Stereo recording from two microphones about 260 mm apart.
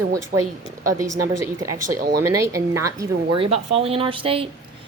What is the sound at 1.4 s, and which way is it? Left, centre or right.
A woman's voice, centre.